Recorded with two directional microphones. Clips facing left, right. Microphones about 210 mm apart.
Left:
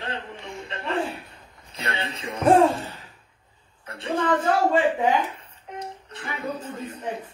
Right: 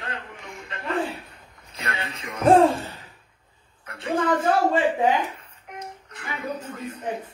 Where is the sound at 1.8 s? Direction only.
30° left (ahead or behind).